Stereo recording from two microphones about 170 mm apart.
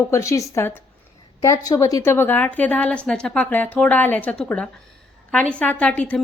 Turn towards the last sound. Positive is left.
turn(degrees=10)  # may be behind; listen again after turning